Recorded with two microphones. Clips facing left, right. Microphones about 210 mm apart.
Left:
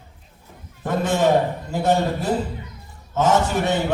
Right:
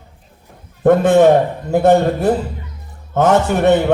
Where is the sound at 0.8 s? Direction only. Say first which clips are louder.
Right 10 dB; 60° right (ahead or behind).